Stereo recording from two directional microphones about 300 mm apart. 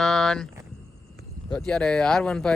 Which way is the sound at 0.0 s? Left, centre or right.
Centre.